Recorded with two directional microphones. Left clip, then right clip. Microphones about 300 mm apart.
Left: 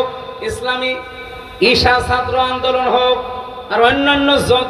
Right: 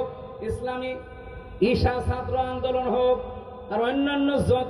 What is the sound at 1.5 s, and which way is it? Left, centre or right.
A man's voice, centre.